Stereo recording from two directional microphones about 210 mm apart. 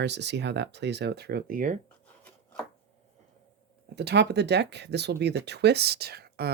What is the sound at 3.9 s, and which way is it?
Speech, 55° right (ahead or behind).